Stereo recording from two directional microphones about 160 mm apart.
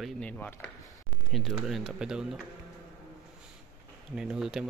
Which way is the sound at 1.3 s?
Centre (ahead or behind).